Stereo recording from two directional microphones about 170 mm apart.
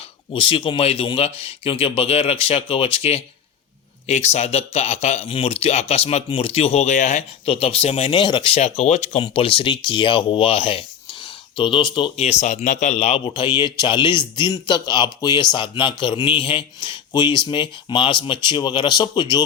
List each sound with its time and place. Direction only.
0.3 s a man's voice: 30° left (ahead or behind)